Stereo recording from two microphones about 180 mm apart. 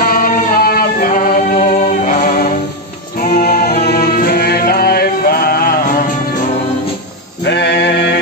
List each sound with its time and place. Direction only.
0.0 s music: 55° left (ahead or behind)
7.4 s sheep: 75° left (ahead or behind)